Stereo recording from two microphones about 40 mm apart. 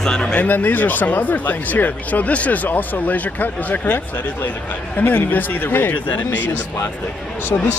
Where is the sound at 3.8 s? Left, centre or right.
Left.